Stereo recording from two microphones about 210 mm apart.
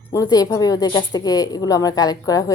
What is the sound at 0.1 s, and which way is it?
A woman's voice, 15° left (ahead or behind).